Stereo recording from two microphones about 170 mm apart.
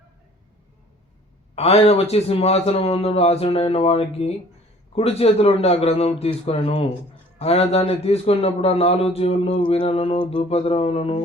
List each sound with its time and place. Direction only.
1.5 s speech: 35° left (ahead or behind)